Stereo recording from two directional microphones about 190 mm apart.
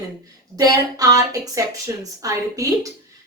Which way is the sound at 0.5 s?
20° right (ahead or behind).